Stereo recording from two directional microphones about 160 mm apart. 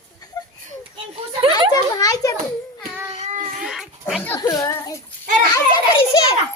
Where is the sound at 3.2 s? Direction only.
45° right (ahead or behind).